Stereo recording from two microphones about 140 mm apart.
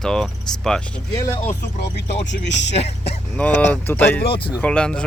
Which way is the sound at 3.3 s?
10° left (ahead or behind).